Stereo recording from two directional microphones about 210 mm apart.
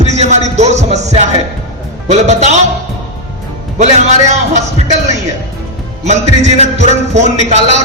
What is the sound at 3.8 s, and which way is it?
Speech, 30° right (ahead or behind).